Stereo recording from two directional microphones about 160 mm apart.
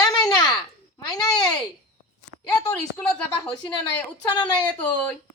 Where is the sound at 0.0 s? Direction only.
25° left (ahead or behind).